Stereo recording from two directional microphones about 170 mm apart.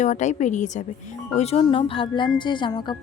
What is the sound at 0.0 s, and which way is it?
A woman's voice, 45° left (ahead or behind).